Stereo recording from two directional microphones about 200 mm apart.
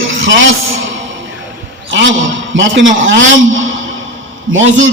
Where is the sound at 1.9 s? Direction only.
65° right (ahead or behind).